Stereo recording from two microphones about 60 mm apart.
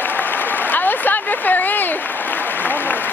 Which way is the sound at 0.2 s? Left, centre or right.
Left.